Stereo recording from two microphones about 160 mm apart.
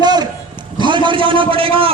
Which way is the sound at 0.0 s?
25° right (ahead or behind).